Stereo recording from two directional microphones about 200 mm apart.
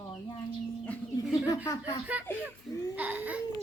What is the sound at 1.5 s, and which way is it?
Speech, 20° left (ahead or behind).